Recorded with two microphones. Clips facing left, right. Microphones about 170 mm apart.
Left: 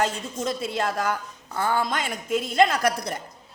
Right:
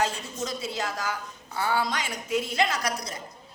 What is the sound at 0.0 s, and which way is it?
A woman's voice, 55° left (ahead or behind).